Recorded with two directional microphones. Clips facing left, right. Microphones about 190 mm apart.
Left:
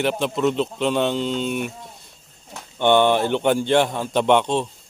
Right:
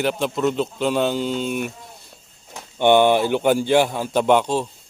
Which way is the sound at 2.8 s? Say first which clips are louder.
Right 2 dB; 10° right (ahead or behind).